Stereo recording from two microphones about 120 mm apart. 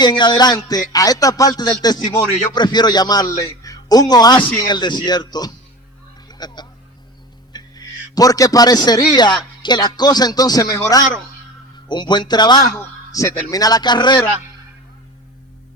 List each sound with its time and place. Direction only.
0.0 s speech: 35° left (ahead or behind)
6.2 s a sound: 35° left (ahead or behind)
7.5 s a man's voice: 30° left (ahead or behind)